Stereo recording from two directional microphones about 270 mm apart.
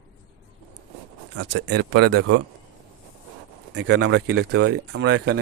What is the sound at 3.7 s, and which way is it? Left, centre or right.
Speech, right.